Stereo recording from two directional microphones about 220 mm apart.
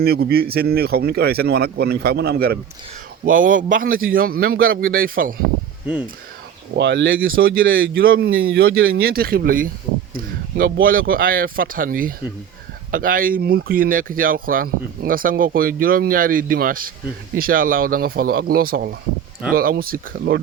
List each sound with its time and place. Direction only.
0.0 s speech: 45° right (ahead or behind)
6.7 s speech: 50° right (ahead or behind)
7.3 s speech: 40° right (ahead or behind)
8.3 s speech: 65° right (ahead or behind)
8.9 s speech: 45° right (ahead or behind)